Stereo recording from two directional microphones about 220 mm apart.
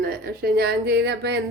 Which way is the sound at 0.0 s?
45° right (ahead or behind).